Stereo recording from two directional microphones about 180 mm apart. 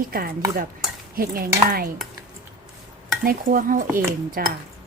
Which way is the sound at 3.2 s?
50° right (ahead or behind).